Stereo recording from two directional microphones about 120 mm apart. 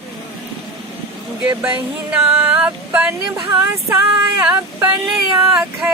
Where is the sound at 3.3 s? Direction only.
25° right (ahead or behind).